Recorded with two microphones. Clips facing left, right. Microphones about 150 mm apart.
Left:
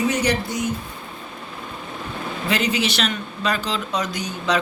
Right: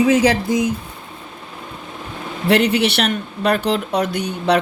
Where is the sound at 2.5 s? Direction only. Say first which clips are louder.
Right 7 dB; 65° right (ahead or behind).